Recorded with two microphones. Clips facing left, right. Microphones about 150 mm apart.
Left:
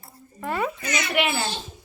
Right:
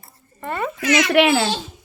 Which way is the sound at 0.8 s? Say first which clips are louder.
Right 9 dB; 90° right.